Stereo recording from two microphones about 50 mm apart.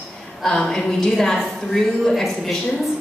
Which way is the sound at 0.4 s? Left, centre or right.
Centre.